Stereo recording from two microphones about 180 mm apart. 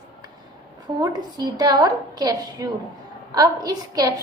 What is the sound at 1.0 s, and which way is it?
A woman's voice, 20° right (ahead or behind).